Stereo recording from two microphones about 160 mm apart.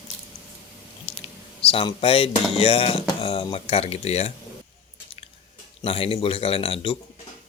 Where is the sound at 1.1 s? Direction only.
35° left (ahead or behind).